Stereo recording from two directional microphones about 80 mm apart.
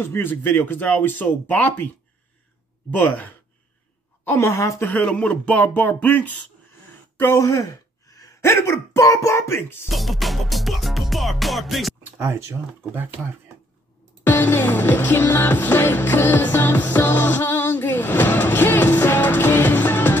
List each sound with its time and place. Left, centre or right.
0.0 s speech: left
2.9 s speech: left
4.2 s a sound: left
4.8 s speech: centre
7.3 s a sound: left
9.8 s music: centre
12.9 s speech: right
14.2 s music: left